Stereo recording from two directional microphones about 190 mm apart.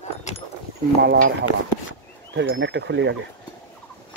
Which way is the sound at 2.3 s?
75° right (ahead or behind).